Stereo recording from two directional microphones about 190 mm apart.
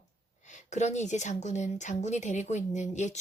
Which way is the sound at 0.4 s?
40° left (ahead or behind).